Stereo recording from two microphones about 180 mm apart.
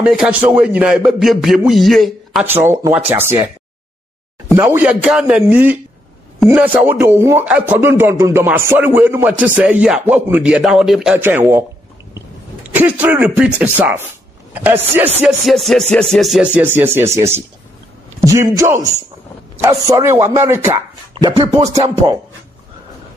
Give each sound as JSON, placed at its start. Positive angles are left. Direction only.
{"t": 0.0, "sound": "a man's voice", "side_deg": -5}
{"t": 2.4, "sound": "speech", "side_deg": -10}
{"t": 4.6, "sound": "speech", "side_deg": -10}
{"t": 12.7, "sound": "speech", "side_deg": -10}
{"t": 15.2, "sound": "a man's voice", "side_deg": 0}
{"t": 21.1, "sound": "speech", "side_deg": -30}